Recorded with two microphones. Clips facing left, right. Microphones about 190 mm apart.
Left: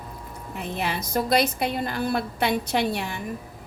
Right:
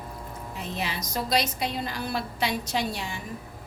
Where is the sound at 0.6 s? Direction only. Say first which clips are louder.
Left 4 dB; 55° left (ahead or behind).